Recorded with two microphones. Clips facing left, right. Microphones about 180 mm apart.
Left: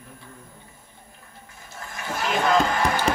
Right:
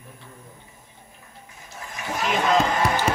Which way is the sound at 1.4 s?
20° right (ahead or behind).